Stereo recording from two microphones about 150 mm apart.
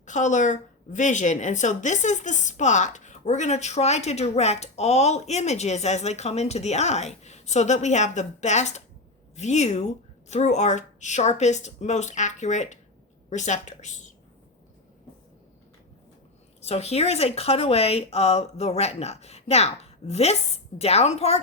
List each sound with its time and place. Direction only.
0.0 s speech: 55° left (ahead or behind)
16.6 s speech: 45° left (ahead or behind)